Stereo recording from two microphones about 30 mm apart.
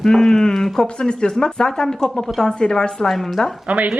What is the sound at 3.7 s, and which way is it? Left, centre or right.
Speech, right.